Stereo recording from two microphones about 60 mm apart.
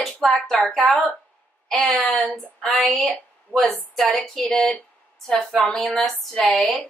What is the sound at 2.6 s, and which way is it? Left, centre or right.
A woman's voice, centre.